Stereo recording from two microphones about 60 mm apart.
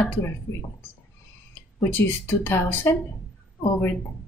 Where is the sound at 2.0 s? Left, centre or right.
Left.